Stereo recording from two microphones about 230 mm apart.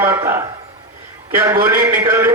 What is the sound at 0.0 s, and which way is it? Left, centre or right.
Speech, centre.